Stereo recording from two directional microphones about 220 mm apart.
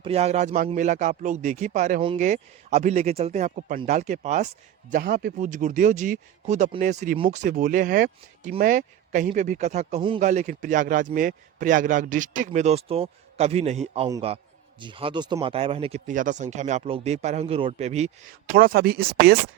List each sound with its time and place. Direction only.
0.0 s speech: 30° right (ahead or behind); by 19.4 s 45° right (ahead or behind)